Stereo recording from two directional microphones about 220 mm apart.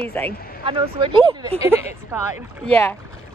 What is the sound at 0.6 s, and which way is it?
Speech, 25° right (ahead or behind).